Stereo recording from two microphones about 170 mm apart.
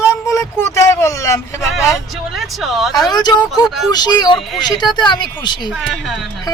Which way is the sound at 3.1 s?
25° left (ahead or behind).